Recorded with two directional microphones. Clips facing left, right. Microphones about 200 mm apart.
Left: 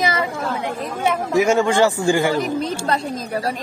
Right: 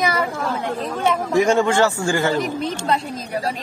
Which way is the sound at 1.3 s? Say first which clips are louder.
Left 1 dB; 10° left (ahead or behind).